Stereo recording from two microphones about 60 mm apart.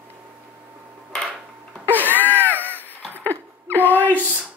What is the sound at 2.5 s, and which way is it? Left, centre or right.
Crow, left.